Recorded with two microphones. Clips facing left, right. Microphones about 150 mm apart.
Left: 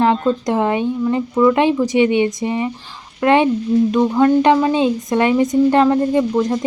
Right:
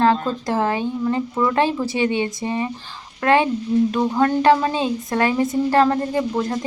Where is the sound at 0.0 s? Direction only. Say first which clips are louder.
Left 3 dB; 20° left (ahead or behind).